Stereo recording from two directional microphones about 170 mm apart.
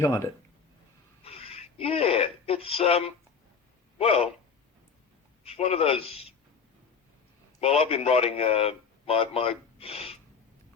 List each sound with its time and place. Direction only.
0.0 s speech: 15° left (ahead or behind)
1.2 s speech: 35° left (ahead or behind)
5.4 s a man's voice: 35° left (ahead or behind)
7.6 s a man's voice: 35° left (ahead or behind)